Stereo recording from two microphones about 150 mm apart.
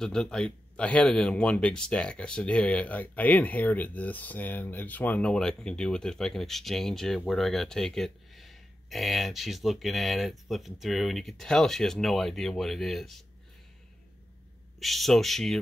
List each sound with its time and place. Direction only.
0.0 s speech: 5° left (ahead or behind)
14.8 s speech: centre (ahead or behind)